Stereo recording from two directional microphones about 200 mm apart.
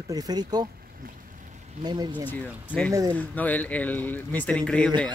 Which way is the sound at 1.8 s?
20° right (ahead or behind).